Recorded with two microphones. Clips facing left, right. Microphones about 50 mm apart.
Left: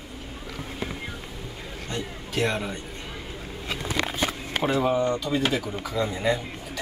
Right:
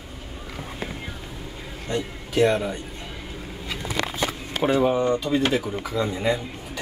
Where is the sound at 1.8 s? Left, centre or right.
Centre.